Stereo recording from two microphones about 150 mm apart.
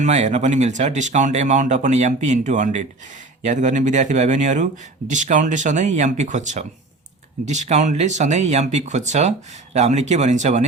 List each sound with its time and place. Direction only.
0.0 s speech: 50° right (ahead or behind)